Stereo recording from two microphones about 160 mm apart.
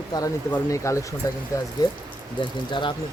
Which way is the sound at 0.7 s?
20° left (ahead or behind).